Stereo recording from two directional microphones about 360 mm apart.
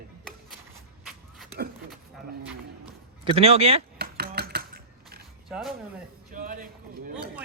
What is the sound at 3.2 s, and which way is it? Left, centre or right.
Speech, centre.